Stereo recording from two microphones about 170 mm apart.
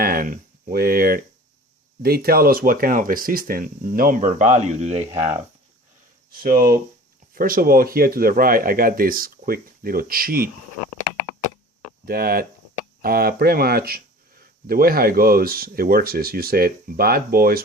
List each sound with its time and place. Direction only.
0.0 s a sound: 60° right (ahead or behind)
2.0 s speech: 65° right (ahead or behind); by 5.3 s 40° right (ahead or behind)
6.3 s speech: 60° right (ahead or behind)
12.0 s speech: 60° right (ahead or behind)